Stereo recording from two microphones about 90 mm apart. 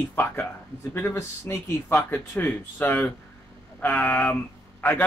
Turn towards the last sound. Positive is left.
turn(degrees=15)  # may be behind; listen again after turning